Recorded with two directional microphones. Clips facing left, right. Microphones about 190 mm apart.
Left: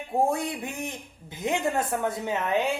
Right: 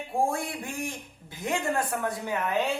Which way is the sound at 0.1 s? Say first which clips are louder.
Left 3 dB; 20° left (ahead or behind).